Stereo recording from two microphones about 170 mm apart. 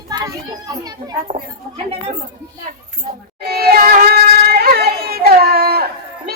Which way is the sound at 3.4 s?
65° right (ahead or behind).